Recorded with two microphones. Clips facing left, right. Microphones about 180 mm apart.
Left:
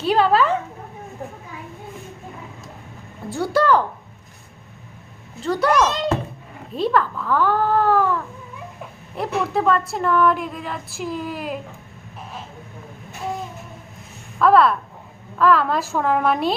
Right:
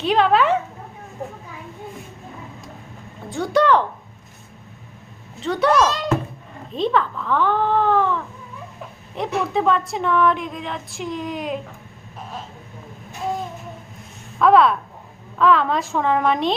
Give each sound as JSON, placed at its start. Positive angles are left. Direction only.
{"t": 0.0, "sound": "speech", "side_deg": 5}
{"t": 3.2, "sound": "speech", "side_deg": 5}
{"t": 5.4, "sound": "speech", "side_deg": 0}
{"t": 5.7, "sound": "a child's voice", "side_deg": 20}
{"t": 6.7, "sound": "speech", "side_deg": 5}
{"t": 14.3, "sound": "speech", "side_deg": 0}